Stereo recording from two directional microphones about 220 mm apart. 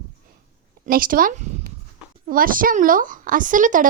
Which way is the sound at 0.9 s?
40° right (ahead or behind).